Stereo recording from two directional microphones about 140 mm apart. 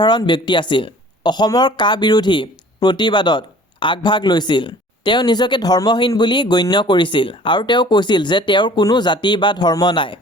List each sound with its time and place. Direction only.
0.0 s speech: 30° left (ahead or behind)